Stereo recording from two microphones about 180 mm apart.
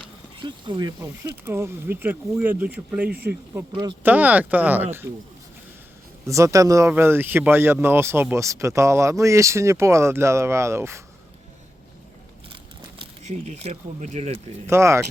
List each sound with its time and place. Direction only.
0.4 s speech: 25° right (ahead or behind); by 3.1 s 5° right (ahead or behind)
3.1 s speech: 60° right (ahead or behind)
4.0 s speech: 10° right (ahead or behind)
6.2 s speech: 15° right (ahead or behind)
13.0 s speech: 40° right (ahead or behind)
14.7 s speech: 15° right (ahead or behind)